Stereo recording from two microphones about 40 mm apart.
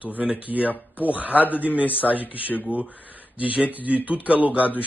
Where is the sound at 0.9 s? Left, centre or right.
Right.